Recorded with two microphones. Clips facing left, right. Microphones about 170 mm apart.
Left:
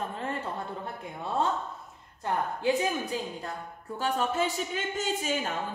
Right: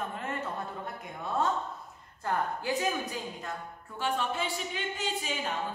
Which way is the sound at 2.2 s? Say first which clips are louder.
Left 2 dB; 25° left (ahead or behind).